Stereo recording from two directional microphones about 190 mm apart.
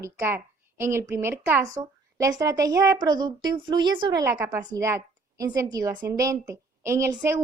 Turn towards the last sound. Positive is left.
turn(degrees=-15)  # may be behind; listen again after turning